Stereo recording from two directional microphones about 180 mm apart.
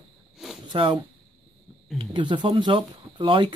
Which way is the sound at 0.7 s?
25° right (ahead or behind).